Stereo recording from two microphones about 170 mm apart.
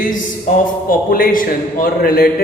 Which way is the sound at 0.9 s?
55° left (ahead or behind).